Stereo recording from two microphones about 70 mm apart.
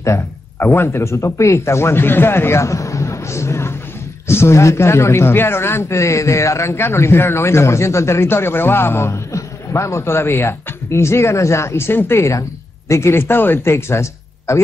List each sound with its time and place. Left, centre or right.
0.6 s a man's voice: left